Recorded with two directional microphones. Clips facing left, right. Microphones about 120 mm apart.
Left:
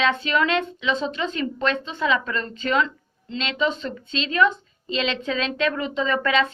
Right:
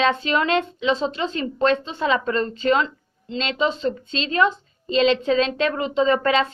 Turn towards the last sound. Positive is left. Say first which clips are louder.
# right 3 dB
turn(degrees=-35)  # may be behind; listen again after turning